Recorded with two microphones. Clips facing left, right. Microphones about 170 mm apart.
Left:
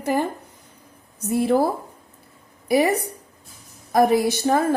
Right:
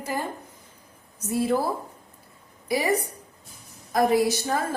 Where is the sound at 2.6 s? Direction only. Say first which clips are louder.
Left 7 dB; 60° left (ahead or behind).